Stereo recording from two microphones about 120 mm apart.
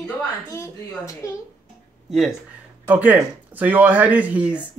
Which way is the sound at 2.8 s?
15° right (ahead or behind).